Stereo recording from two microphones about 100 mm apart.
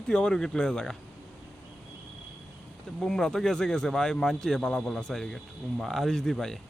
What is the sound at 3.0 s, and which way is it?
Speech, 5° left (ahead or behind).